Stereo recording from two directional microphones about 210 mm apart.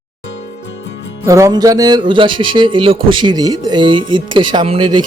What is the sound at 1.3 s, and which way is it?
Speech, 15° right (ahead or behind).